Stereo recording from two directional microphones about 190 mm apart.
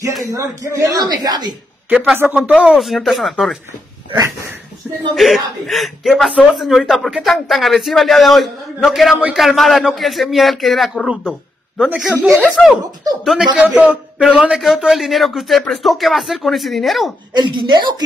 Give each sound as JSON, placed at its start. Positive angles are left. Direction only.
{"t": 0.3, "sound": "speech", "side_deg": -15}
{"t": 1.9, "sound": "speech", "side_deg": -10}
{"t": 5.1, "sound": "a woman's voice", "side_deg": 0}
{"t": 12.6, "sound": "speech", "side_deg": 5}
{"t": 17.3, "sound": "speech", "side_deg": -25}